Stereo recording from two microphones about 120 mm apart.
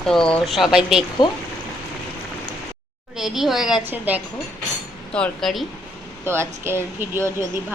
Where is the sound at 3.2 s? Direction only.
Centre (ahead or behind).